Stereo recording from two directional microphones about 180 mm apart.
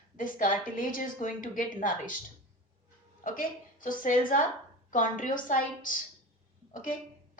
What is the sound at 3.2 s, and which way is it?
A woman's voice, 50° left (ahead or behind).